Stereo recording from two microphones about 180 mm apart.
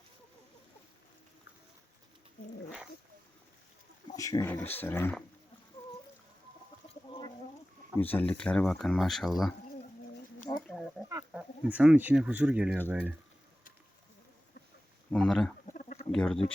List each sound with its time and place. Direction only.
4.1 s speech: 20° left (ahead or behind)
6.8 s chicken: 30° left (ahead or behind)
7.9 s speech: 10° left (ahead or behind)
10.7 s a sound: centre (ahead or behind)
11.3 s speech: 5° right (ahead or behind)
15.1 s speech: 5° left (ahead or behind)
15.6 s bird: 45° left (ahead or behind)
16.1 s speech: 5° left (ahead or behind)